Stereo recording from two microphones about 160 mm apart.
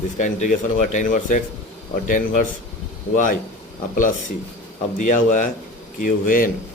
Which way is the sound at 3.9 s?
55° left (ahead or behind).